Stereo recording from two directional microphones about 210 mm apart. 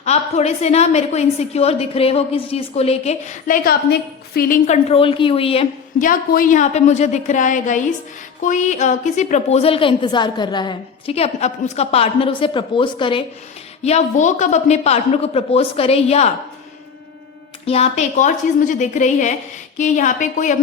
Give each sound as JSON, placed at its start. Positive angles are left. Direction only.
{"t": 0.0, "sound": "a woman's voice", "side_deg": 30}
{"t": 6.0, "sound": "a woman's voice", "side_deg": 40}
{"t": 17.7, "sound": "a woman's voice", "side_deg": 30}